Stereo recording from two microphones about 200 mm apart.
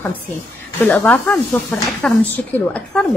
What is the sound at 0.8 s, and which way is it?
Speech, 10° left (ahead or behind).